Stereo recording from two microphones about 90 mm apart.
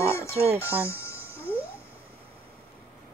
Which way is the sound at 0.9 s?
30° left (ahead or behind).